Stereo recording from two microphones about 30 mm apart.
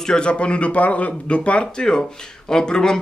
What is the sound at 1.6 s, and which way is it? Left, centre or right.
Speech, left.